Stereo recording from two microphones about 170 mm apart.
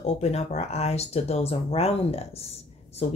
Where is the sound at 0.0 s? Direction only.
40° left (ahead or behind).